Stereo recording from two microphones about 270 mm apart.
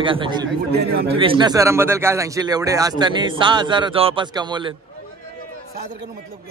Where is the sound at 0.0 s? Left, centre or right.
Centre.